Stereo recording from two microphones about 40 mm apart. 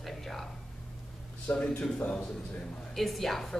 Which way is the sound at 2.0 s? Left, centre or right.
Left.